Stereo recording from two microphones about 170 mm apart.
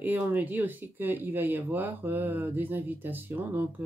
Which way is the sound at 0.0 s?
10° right (ahead or behind).